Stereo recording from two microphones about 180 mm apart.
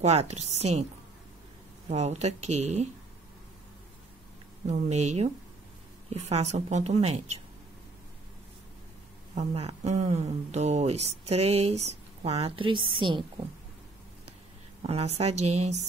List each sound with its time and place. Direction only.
0.0 s speech: 35° right (ahead or behind)
1.9 s speech: 35° right (ahead or behind)
4.6 s speech: 40° right (ahead or behind)
9.3 s a woman's voice: 35° right (ahead or behind)
14.8 s speech: 35° right (ahead or behind)